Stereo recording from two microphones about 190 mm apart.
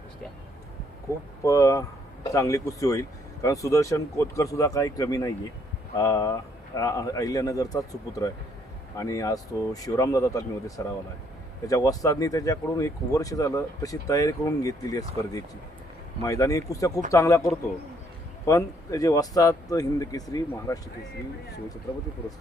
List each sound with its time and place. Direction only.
1.5 s speech: 15° left (ahead or behind)
11.7 s speech: 20° left (ahead or behind)
21.9 s speech: 20° left (ahead or behind)